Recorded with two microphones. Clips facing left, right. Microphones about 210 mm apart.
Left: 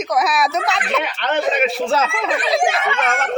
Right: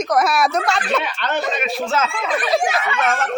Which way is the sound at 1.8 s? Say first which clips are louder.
Left 2 dB; 30° left (ahead or behind).